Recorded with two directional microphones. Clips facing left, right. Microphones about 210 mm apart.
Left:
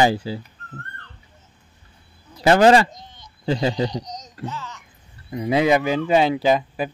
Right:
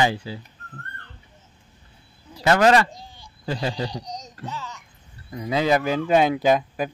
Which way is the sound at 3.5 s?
25° left (ahead or behind).